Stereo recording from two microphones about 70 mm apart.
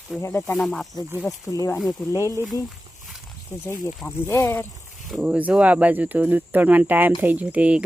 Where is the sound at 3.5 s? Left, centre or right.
Centre.